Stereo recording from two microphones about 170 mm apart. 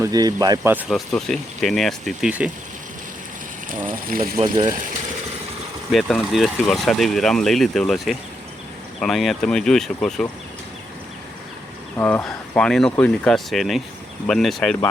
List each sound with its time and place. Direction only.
0.0 s speech: 20° right (ahead or behind)
0.7 s speech: 10° right (ahead or behind)
0.9 s speech: centre (ahead or behind)
3.8 s speech: 55° right (ahead or behind)
4.4 s speech: 25° right (ahead or behind)
5.9 s speech: centre (ahead or behind)
11.9 s speech: 10° left (ahead or behind)